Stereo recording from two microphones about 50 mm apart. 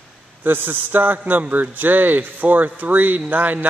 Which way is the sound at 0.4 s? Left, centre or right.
Right.